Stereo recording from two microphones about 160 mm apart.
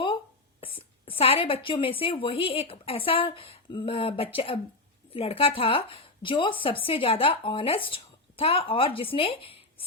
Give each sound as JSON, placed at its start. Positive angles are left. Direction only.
{"t": 0.6, "sound": "speech", "side_deg": 35}